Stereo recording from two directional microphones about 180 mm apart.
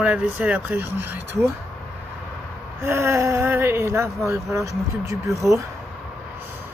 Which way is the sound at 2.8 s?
15° right (ahead or behind).